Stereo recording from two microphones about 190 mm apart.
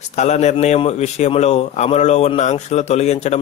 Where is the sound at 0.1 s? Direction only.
35° left (ahead or behind).